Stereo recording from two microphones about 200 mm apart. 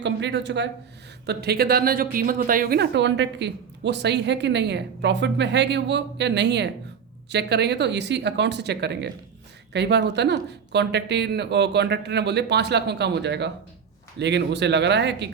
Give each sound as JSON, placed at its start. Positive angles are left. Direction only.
{"t": 0.0, "sound": "speech", "side_deg": -60}